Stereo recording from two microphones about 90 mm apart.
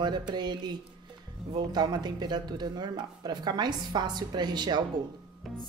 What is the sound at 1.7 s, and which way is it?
Speech, 50° right (ahead or behind).